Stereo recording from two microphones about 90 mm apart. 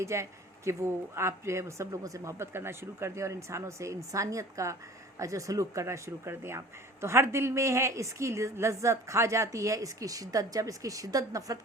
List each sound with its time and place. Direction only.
0.0 s speech: 30° right (ahead or behind)